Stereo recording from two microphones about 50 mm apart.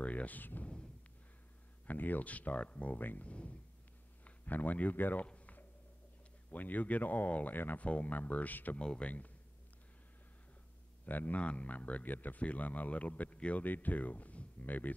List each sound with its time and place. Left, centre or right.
0.0 s a sound: left
1.9 s speech: left
3.0 s speech: left
3.3 s speech: left
5.2 s a sound: left
6.5 s speech: left
7.8 s speech: left
8.7 s speech: centre
11.1 s speech: left